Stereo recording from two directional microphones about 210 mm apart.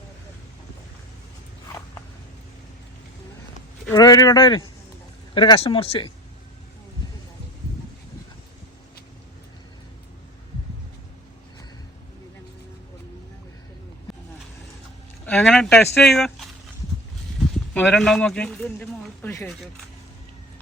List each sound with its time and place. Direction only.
3.9 s speech: 20° left (ahead or behind)
15.3 s speech: 5° left (ahead or behind)
17.7 s speech: 5° left (ahead or behind)